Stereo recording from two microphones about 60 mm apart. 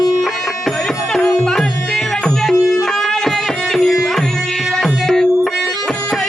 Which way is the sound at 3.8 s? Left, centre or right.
Centre.